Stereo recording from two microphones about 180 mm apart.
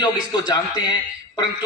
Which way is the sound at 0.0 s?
25° left (ahead or behind).